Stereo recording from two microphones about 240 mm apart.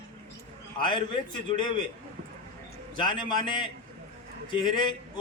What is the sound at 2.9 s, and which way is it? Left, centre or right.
Speech, centre.